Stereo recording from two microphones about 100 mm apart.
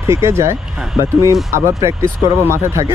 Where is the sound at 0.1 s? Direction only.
30° right (ahead or behind).